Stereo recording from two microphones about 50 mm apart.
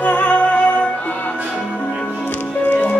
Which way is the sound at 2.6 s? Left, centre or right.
Left.